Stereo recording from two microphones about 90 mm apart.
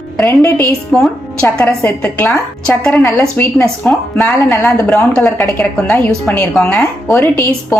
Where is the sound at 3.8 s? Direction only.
20° left (ahead or behind).